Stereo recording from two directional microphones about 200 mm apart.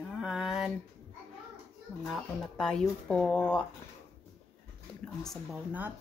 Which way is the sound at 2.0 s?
Centre (ahead or behind).